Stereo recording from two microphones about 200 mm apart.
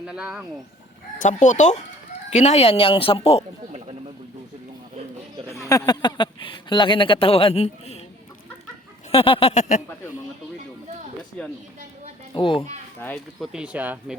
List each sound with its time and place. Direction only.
0.0 s speech: 5° right (ahead or behind)
1.2 s speech: 40° left (ahead or behind)
3.7 s a sound: 30° right (ahead or behind)
5.6 s speech: 15° left (ahead or behind)
9.1 s speech: 25° left (ahead or behind)
12.3 s speech: 25° left (ahead or behind)
13.0 s speech: 10° left (ahead or behind)
13.5 s speech: 5° right (ahead or behind)